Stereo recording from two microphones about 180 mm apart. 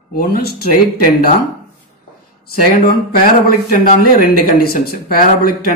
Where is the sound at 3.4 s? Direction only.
55° left (ahead or behind).